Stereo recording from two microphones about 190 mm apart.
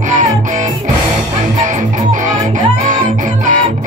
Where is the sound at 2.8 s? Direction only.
45° right (ahead or behind).